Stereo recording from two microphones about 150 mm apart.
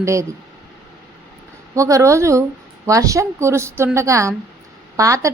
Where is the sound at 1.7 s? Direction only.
20° right (ahead or behind).